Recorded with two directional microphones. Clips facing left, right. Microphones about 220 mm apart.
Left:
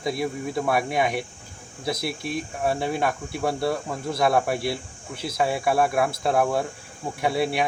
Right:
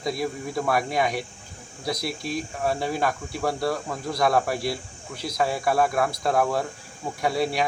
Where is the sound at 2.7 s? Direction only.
Centre (ahead or behind).